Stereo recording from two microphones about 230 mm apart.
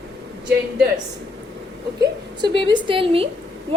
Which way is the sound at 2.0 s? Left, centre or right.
Centre.